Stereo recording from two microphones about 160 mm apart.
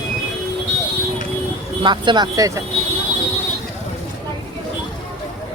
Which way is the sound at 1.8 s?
30° right (ahead or behind).